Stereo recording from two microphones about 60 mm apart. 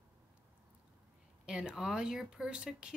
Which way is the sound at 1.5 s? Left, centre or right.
Centre.